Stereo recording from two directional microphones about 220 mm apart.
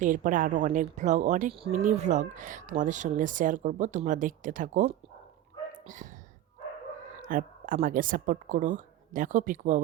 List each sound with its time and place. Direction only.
0.0 s speech: 35° right (ahead or behind)
7.2 s speech: 40° right (ahead or behind)